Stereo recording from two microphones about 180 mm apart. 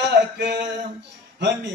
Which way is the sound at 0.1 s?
65° right (ahead or behind).